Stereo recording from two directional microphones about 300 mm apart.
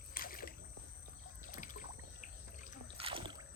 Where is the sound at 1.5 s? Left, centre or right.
Left.